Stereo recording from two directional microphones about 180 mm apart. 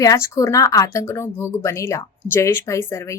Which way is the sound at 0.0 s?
20° left (ahead or behind).